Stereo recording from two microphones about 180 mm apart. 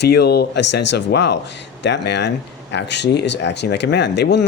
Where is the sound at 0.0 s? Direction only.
65° left (ahead or behind).